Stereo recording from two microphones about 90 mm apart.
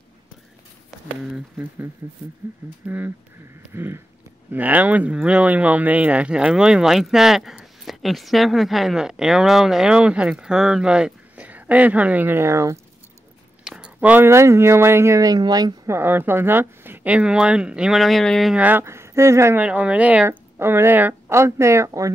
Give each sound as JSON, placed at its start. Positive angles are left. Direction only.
{"t": 1.2, "sound": "speech", "side_deg": -10}
{"t": 3.7, "sound": "speech", "side_deg": -25}
{"t": 13.7, "sound": "a sound", "side_deg": -10}
{"t": 14.2, "sound": "speech", "side_deg": -30}
{"t": 15.9, "sound": "speech", "side_deg": -25}
{"t": 18.5, "sound": "speech", "side_deg": -15}
{"t": 19.6, "sound": "speech", "side_deg": -15}
{"t": 20.2, "sound": "speech", "side_deg": -25}
{"t": 21.3, "sound": "speech", "side_deg": -30}